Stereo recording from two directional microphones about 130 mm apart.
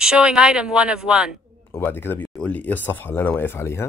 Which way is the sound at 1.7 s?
15° left (ahead or behind).